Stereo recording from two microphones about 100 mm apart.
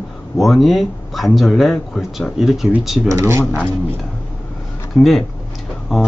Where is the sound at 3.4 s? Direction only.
10° left (ahead or behind).